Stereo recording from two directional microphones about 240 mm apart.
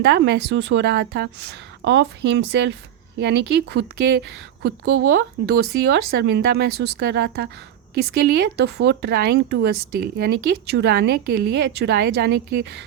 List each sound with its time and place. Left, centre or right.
0.0 s a woman's voice: right